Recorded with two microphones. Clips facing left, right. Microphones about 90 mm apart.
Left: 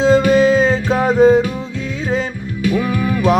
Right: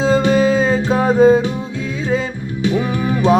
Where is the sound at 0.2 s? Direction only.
25° right (ahead or behind).